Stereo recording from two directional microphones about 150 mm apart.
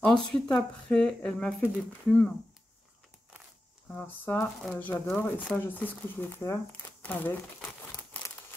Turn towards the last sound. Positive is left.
turn(degrees=10)  # may be behind; listen again after turning